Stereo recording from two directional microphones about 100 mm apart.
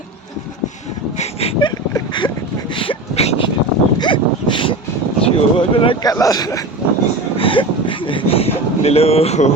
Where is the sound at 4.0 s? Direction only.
55° left (ahead or behind).